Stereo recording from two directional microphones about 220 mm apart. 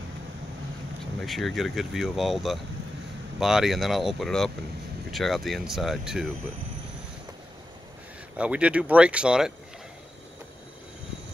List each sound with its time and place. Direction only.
1.2 s speech: centre (ahead or behind)
8.4 s speech: 5° right (ahead or behind)